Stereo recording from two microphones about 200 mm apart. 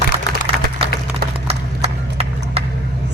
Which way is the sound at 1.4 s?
30° right (ahead or behind).